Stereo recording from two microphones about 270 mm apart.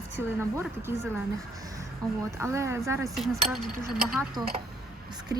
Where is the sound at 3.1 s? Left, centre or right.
Centre.